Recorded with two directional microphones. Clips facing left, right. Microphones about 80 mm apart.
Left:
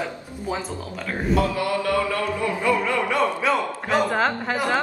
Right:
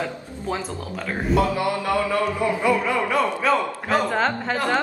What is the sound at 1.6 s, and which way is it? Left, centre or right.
Music, right.